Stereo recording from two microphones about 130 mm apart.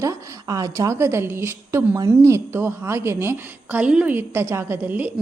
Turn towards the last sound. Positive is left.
turn(degrees=-15)  # may be behind; listen again after turning